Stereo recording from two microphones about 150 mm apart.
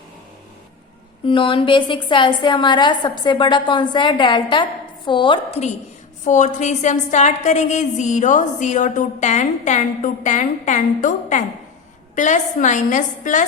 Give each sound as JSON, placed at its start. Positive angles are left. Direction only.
{"t": 1.2, "sound": "a woman's voice", "side_deg": 35}
{"t": 6.2, "sound": "a woman's voice", "side_deg": 55}